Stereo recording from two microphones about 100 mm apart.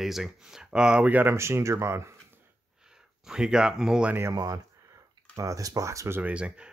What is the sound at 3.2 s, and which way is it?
Speech, 5° right (ahead or behind).